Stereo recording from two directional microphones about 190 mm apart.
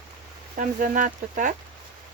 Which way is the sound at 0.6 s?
40° right (ahead or behind).